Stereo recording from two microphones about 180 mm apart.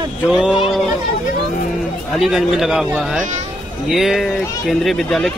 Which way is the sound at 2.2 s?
Centre (ahead or behind).